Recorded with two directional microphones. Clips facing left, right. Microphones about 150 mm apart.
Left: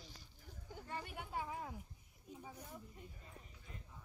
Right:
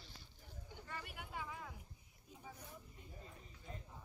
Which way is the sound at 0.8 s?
30° left (ahead or behind).